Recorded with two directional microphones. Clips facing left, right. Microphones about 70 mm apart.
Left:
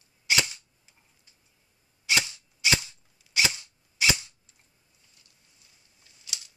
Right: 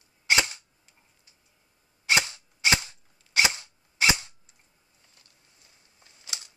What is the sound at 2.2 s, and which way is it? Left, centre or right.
Cap gun, right.